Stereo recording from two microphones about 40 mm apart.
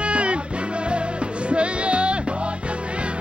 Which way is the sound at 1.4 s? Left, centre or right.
Right.